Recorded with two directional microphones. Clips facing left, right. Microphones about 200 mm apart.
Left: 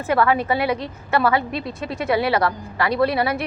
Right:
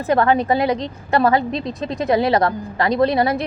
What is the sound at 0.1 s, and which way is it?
A woman's voice, 35° right (ahead or behind).